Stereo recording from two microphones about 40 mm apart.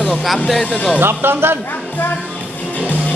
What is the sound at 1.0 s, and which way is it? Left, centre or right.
Speech, right.